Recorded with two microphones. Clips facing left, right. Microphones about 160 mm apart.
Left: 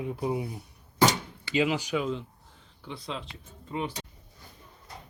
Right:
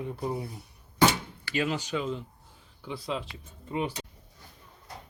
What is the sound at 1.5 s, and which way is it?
Speech, 15° left (ahead or behind).